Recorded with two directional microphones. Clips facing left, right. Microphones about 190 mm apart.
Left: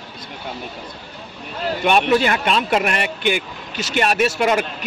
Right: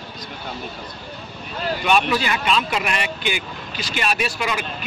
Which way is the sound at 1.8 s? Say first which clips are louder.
Left 4 dB; 60° left (ahead or behind).